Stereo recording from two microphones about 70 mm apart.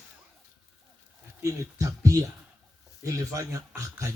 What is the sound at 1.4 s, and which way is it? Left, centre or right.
A man's voice, right.